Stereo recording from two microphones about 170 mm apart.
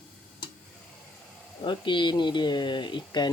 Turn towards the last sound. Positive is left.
turn(degrees=25)  # may be behind; listen again after turning